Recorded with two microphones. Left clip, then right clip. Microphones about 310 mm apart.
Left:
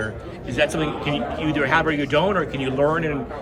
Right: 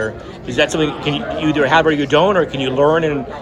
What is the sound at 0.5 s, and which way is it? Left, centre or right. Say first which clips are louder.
A man's voice: right 5 dB; centre.